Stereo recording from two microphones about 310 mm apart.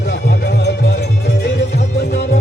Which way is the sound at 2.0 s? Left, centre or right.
Left.